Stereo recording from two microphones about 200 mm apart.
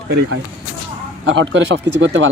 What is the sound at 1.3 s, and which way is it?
Speech, 65° right (ahead or behind).